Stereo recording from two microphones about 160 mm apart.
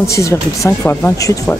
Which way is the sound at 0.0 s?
20° left (ahead or behind).